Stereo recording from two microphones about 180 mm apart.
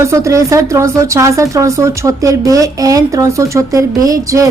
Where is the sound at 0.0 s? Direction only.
15° right (ahead or behind).